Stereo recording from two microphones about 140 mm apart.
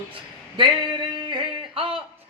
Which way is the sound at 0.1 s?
35° right (ahead or behind).